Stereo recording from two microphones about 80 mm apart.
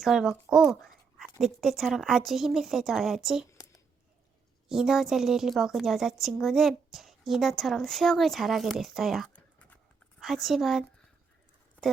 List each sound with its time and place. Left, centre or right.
0.0 s speech: centre
1.4 s speech: centre
4.7 s speech: centre
9.3 s a sound: centre
10.2 s speech: centre